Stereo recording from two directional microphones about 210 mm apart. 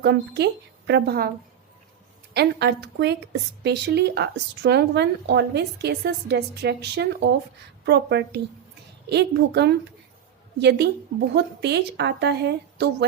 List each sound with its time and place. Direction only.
0.0 s speech: 55° right (ahead or behind)
2.3 s speech: 50° right (ahead or behind)